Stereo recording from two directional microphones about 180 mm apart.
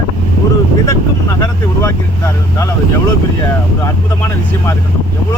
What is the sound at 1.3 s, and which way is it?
Speech, 20° left (ahead or behind).